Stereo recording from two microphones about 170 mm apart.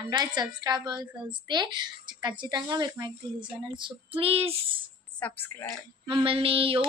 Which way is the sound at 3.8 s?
30° right (ahead or behind).